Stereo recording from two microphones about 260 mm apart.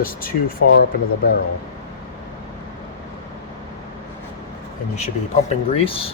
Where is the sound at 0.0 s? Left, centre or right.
Left.